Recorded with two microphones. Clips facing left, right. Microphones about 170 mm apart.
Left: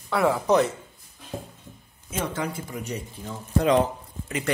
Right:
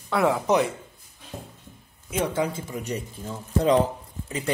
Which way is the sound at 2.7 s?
35° right (ahead or behind).